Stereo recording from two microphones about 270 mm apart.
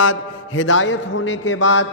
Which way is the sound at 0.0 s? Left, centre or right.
Left.